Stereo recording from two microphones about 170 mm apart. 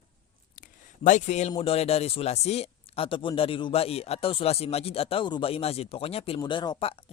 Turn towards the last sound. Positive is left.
turn(degrees=30)  # may be behind; listen again after turning